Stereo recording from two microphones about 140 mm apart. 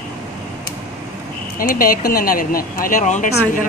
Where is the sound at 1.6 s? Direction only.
90° left; by 3.2 s 65° left (ahead or behind).